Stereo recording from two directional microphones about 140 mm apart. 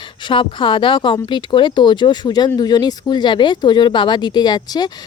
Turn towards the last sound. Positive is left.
turn(degrees=30)  # may be behind; listen again after turning